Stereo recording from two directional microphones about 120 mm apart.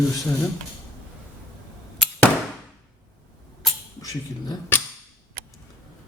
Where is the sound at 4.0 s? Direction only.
35° left (ahead or behind).